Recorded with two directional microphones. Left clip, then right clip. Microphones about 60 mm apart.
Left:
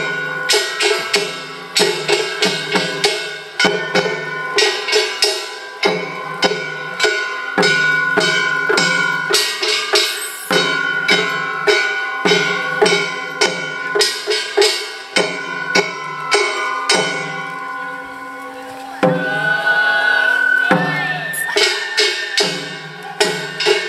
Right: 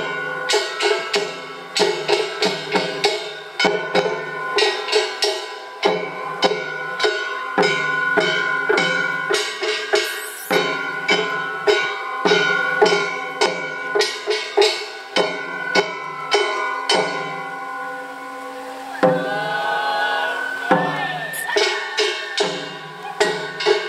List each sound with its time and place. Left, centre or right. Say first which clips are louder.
0.0 s music: left 4 dB; centre
7.1 s music: left 3 dB; left
8.3 s a sound: left 3 dB; left
8.7 s music: left 4 dB; left
10.5 s bell: left 4 dB; left
11.6 s music: left 3 dB; left
12.4 s a sound: left 1 dB; centre
12.7 s music: left 2 dB; centre
16.4 s music: left 3 dB; centre
16.8 s a sound: left 3 dB; centre
18.9 s music: left 2 dB; centre
19.4 s music: left 6 dB; centre